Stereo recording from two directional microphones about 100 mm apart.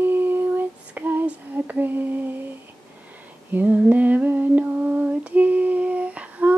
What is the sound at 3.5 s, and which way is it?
Female singing, 15° right (ahead or behind).